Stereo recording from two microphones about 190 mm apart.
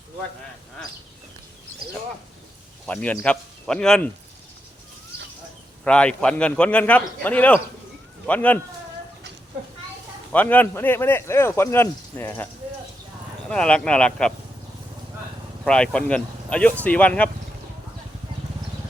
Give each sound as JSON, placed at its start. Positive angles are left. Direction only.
{"t": 2.8, "sound": "speech", "side_deg": 5}
{"t": 5.8, "sound": "speech", "side_deg": 5}
{"t": 10.3, "sound": "speech", "side_deg": 10}
{"t": 13.5, "sound": "speech", "side_deg": 5}
{"t": 15.6, "sound": "speech", "side_deg": 5}